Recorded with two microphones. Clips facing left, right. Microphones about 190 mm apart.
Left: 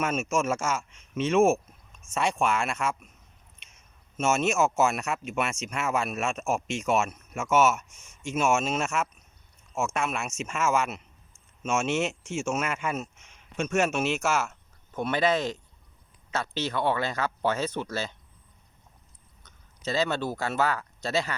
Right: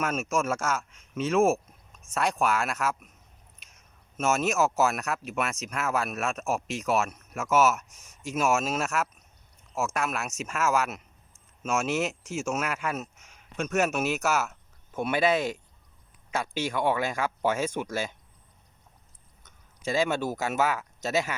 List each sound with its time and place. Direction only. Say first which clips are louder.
0.0 s speech: left 1 dB; centre (ahead or behind)
4.2 s speech: left 1 dB; centre (ahead or behind)
7.9 s speech: left 1 dB; 40° right (ahead or behind)
8.3 s speech: left 1 dB; centre (ahead or behind)
19.8 s speech: right 1 dB; 10° right (ahead or behind)